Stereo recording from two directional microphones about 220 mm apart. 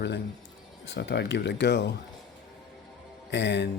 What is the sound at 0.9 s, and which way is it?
Speech, 55° left (ahead or behind).